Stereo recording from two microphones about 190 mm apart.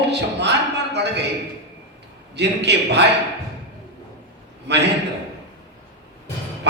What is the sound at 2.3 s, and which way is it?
Speech, 65° right (ahead or behind).